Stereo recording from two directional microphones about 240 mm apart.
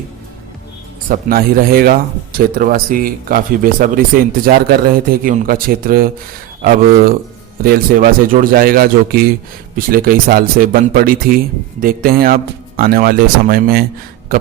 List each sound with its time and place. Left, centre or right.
1.0 s speech: right